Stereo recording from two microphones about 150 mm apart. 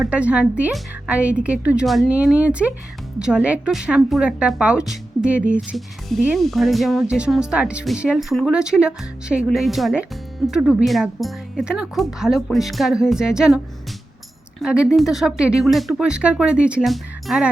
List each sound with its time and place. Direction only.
0.0 s a woman's voice: 10° right (ahead or behind)
14.6 s speech: 5° right (ahead or behind)